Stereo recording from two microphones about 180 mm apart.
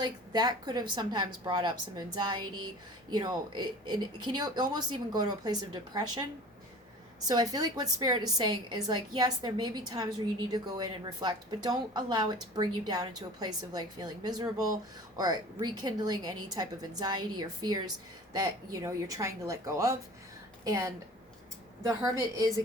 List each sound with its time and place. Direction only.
0.0 s speech: 25° right (ahead or behind)
7.3 s speech: 20° right (ahead or behind)